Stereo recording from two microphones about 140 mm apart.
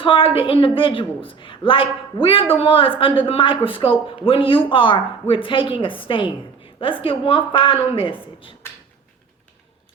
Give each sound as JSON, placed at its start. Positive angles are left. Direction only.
{"t": 0.0, "sound": "speech", "side_deg": 40}